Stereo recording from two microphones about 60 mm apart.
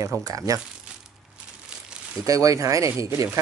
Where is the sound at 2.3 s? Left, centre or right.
Right.